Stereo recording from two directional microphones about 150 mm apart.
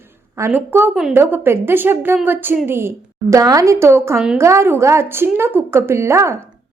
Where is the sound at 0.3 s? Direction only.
15° right (ahead or behind).